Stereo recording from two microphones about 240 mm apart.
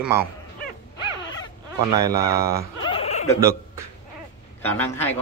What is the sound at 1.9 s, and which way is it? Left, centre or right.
Speech, centre.